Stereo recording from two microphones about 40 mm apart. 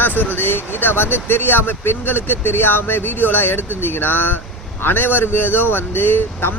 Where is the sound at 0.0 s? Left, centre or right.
Left.